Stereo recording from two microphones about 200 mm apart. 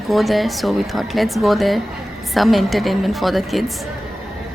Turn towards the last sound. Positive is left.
turn(degrees=0)  # may be behind; listen again after turning